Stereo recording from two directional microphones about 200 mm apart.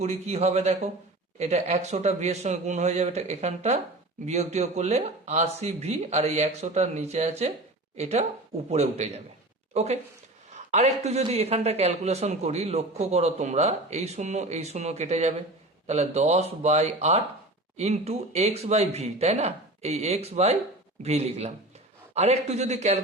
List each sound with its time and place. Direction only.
0.0 s a man's voice: 35° right (ahead or behind)